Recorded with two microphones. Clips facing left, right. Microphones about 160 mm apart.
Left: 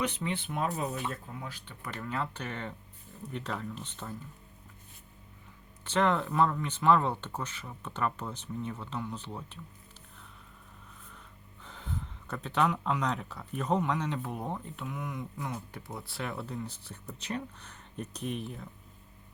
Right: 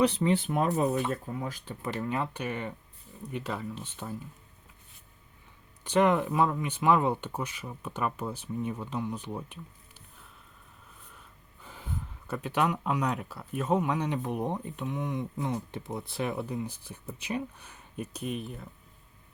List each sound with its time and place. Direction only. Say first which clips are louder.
0.0 s speech: right 8 dB; 35° right (ahead or behind)
1.8 s speech: right 4 dB; 20° right (ahead or behind)
5.8 s speech: right 4 dB; 15° right (ahead or behind)
11.6 s speech: right 1 dB; 5° right (ahead or behind)